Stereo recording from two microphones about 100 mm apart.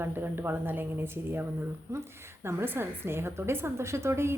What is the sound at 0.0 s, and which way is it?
A woman's voice, 20° right (ahead or behind).